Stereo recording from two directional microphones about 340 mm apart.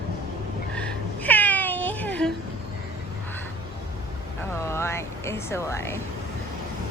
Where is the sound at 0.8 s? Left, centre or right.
Centre.